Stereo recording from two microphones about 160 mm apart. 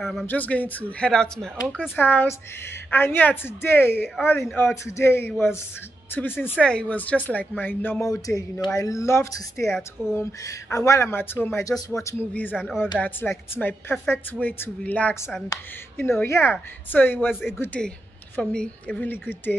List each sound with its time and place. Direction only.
0.0 s speech: centre (ahead or behind)
0.3 s speech: 10° left (ahead or behind)
17.3 s speech: centre (ahead or behind)